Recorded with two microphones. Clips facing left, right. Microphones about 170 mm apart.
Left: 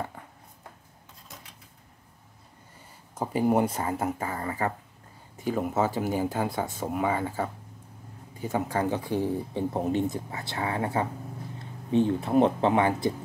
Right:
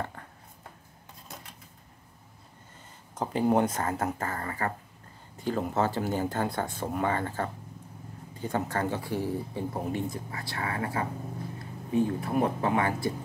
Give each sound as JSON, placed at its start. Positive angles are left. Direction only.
{"t": 3.2, "sound": "speech", "side_deg": 10}